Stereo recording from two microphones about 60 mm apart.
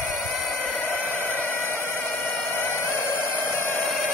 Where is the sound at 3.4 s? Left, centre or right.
Left.